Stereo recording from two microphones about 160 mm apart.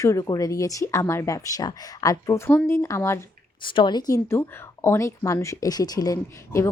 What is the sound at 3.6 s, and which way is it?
Speech, 30° left (ahead or behind).